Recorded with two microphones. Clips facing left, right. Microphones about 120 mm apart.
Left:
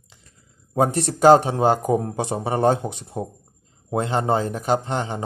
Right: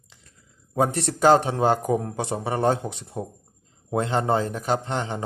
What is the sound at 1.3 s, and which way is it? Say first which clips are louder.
A man's voice: left 4 dB; 10° left (ahead or behind).